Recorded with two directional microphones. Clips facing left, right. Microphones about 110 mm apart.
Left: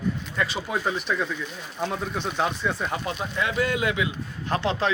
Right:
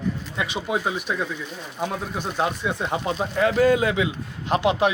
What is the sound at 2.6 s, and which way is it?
Speech, 20° right (ahead or behind).